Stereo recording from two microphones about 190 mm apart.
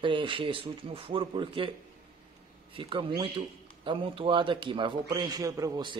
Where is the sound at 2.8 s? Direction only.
25° right (ahead or behind).